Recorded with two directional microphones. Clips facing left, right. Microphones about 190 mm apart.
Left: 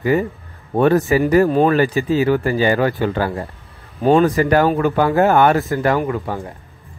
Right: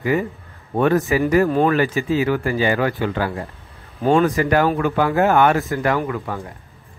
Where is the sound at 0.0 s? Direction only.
35° left (ahead or behind).